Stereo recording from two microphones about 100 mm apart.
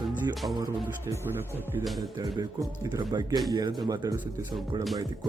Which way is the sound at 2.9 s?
45° right (ahead or behind).